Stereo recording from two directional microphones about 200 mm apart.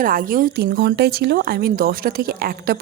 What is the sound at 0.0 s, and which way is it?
Speech, 45° right (ahead or behind).